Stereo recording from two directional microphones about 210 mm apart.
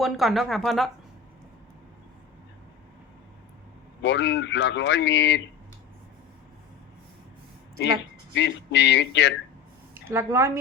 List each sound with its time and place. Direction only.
0.0 s speech: centre (ahead or behind)
4.0 s speech: 55° left (ahead or behind)
7.8 s speech: 60° left (ahead or behind)
9.9 s a woman's voice: 10° right (ahead or behind)